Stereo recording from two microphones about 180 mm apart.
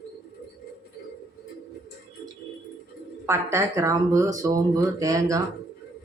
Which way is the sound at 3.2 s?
15° right (ahead or behind).